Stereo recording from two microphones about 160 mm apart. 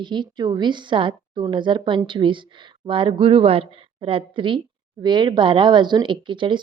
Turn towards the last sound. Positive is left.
turn(degrees=-30)  # may be behind; listen again after turning